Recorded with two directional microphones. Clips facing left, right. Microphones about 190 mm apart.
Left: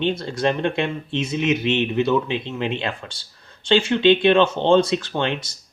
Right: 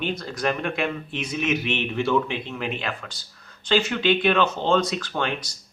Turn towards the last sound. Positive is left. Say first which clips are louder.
# left 3 dB
turn(degrees=25)  # may be behind; listen again after turning